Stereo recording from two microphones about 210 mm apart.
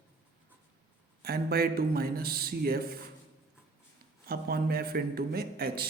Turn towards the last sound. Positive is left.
turn(degrees=-45)  # may be behind; listen again after turning